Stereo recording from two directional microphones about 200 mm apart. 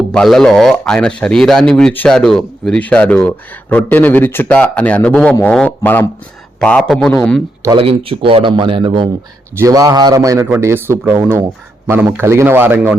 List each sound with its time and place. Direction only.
0.1 s speech: centre (ahead or behind)
7.6 s a man's voice: 25° right (ahead or behind)